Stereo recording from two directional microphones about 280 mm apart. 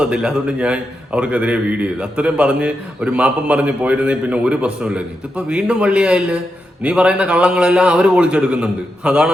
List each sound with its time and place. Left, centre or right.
0.0 s a man's voice: centre